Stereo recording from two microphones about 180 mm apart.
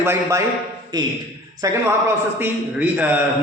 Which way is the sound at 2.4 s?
10° right (ahead or behind).